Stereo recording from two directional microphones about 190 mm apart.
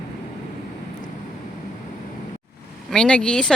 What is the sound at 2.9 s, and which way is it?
Speech, 5° left (ahead or behind).